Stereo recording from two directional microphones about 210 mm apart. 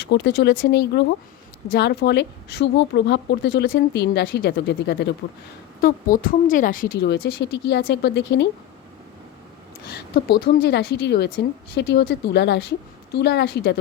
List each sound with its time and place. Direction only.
0.0 s speech: 55° left (ahead or behind)
5.8 s speech: 40° left (ahead or behind)
9.8 s speech: 50° left (ahead or behind)